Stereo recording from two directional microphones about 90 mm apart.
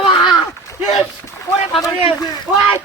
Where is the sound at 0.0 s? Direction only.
65° left (ahead or behind).